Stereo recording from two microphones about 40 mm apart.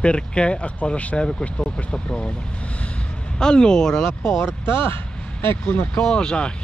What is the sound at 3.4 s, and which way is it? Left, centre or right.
Speech, centre.